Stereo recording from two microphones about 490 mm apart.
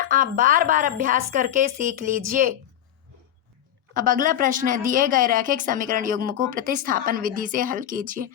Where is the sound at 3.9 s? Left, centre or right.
Centre.